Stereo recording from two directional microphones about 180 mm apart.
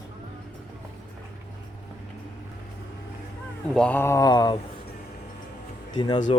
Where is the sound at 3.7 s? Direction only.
5° left (ahead or behind).